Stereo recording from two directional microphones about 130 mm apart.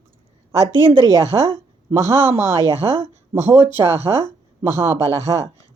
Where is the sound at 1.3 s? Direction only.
15° right (ahead or behind).